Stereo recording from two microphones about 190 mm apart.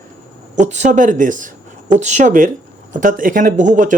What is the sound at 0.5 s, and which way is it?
Speech, 40° right (ahead or behind).